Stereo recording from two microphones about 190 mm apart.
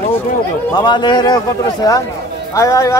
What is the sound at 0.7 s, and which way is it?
A man's voice, 20° left (ahead or behind).